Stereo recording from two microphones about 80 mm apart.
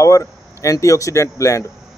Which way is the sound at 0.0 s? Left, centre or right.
Left.